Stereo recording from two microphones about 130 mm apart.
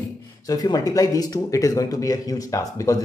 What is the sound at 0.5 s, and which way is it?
A man's voice, 30° left (ahead or behind).